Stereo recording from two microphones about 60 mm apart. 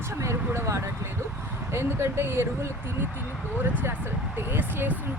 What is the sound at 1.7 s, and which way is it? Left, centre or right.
Speech, right.